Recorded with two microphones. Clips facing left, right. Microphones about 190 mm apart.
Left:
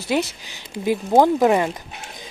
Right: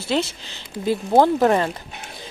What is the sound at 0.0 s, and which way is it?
Speech, 15° left (ahead or behind).